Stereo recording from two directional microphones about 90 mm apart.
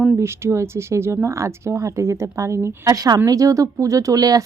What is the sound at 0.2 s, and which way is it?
Speech, 30° right (ahead or behind).